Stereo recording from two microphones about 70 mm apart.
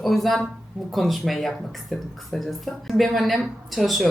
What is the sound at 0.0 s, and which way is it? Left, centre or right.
Speech, centre.